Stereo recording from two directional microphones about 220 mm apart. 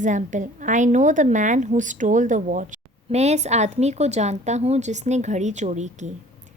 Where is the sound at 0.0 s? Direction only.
35° right (ahead or behind).